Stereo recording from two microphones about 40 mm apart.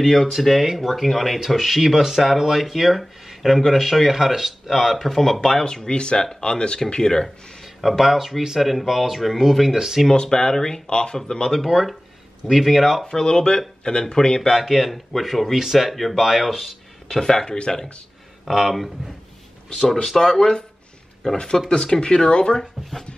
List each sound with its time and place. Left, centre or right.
0.0 s speech: centre
5.7 s speech: centre
7.2 s speech: centre
10.1 s speech: centre
11.5 s speech: centre
13.0 s speech: centre
14.5 s speech: centre
17.1 s speech: centre
17.5 s speech: left
18.4 s speech: centre
20.2 s speech: centre
21.6 s speech: centre
22.6 s speech: centre